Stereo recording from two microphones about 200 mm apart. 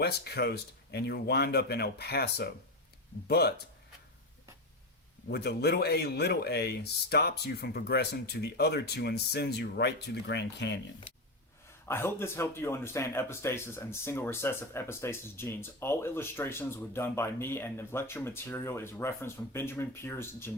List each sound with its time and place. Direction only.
0.0 s speech: 55° left (ahead or behind)
5.3 s speech: 55° left (ahead or behind)
11.9 s a man's voice: 10° left (ahead or behind)